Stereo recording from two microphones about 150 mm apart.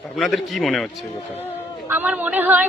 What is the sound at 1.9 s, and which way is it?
Speech, 10° right (ahead or behind).